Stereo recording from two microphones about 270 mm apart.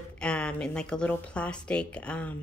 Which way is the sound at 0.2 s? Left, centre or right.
Centre.